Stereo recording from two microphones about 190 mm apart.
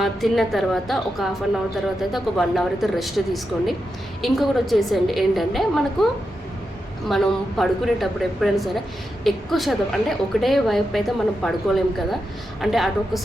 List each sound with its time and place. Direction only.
0.0 s a woman's voice: centre (ahead or behind)
7.1 s a woman's voice: centre (ahead or behind)